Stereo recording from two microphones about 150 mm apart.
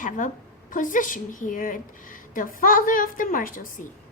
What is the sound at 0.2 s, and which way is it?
A woman's voice, 60° left (ahead or behind).